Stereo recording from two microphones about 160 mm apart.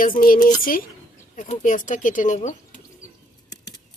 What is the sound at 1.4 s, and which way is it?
Speech, 55° left (ahead or behind).